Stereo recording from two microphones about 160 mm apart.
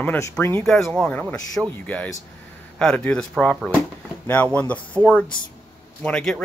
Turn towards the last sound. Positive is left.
turn(degrees=5)  # may be behind; listen again after turning